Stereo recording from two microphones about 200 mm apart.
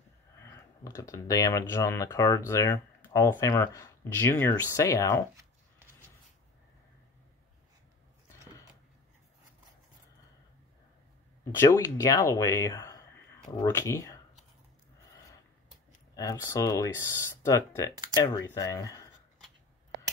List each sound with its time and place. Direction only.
0.8 s speech: 15° left (ahead or behind)
11.5 s speech: 15° left (ahead or behind)
16.2 s speech: 15° left (ahead or behind)